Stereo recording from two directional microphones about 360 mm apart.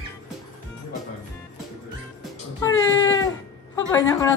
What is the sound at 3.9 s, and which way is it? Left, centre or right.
Speech, centre.